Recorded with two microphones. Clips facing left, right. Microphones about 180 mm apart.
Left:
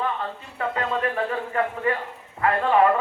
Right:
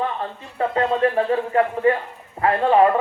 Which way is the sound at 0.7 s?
30° right (ahead or behind).